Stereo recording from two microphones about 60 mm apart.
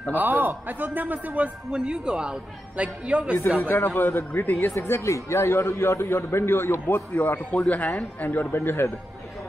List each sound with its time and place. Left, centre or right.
0.1 s a man's voice: right
3.5 s speech: left
4.7 s a man's voice: left
7.2 s speech: left
8.5 s a man's voice: left